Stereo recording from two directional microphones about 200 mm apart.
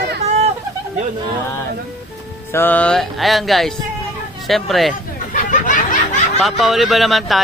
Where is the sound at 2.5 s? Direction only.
10° left (ahead or behind).